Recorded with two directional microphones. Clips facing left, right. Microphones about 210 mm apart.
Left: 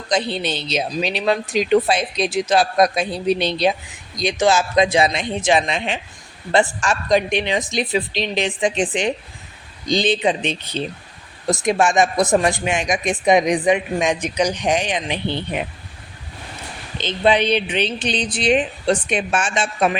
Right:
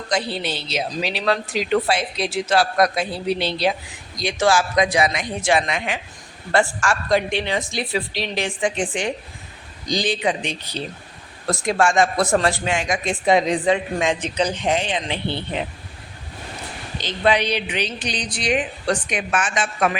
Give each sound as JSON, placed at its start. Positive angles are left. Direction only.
{"t": 0.1, "sound": "speech", "side_deg": 20}
{"t": 17.0, "sound": "speech", "side_deg": 20}